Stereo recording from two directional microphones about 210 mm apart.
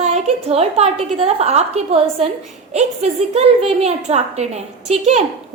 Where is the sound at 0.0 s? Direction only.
30° right (ahead or behind).